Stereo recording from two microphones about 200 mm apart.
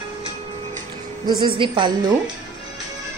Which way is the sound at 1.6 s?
25° right (ahead or behind).